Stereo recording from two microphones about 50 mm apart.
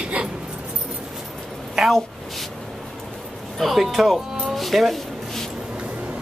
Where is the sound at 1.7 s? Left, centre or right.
Centre.